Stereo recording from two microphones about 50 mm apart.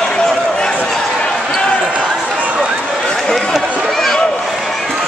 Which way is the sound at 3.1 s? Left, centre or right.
Centre.